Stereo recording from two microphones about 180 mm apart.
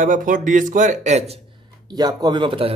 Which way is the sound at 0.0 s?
45° right (ahead or behind).